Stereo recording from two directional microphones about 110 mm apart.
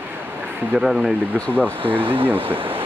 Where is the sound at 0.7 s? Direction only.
5° right (ahead or behind).